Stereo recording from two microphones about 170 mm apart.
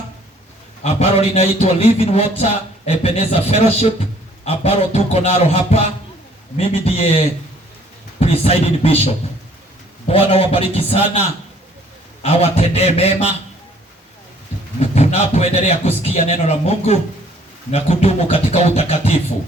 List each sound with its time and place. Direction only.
0.8 s a man's voice: 35° left (ahead or behind)
12.2 s a man's voice: 35° left (ahead or behind)
14.8 s a man's voice: 40° left (ahead or behind)